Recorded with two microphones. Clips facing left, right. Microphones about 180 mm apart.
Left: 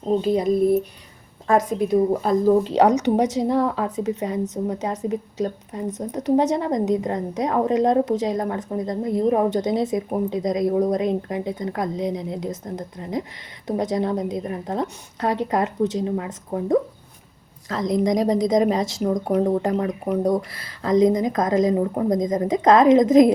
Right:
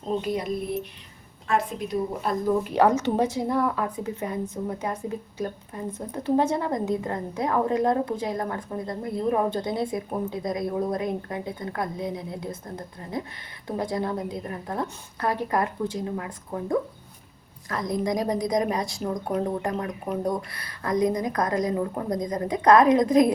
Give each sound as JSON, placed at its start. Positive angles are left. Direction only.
{"t": 0.2, "sound": "a woman's voice", "side_deg": 30}
{"t": 1.5, "sound": "a woman's voice", "side_deg": 40}
{"t": 2.7, "sound": "a woman's voice", "side_deg": 20}
{"t": 19.3, "sound": "speech", "side_deg": 45}
{"t": 19.8, "sound": "a woman's voice", "side_deg": 20}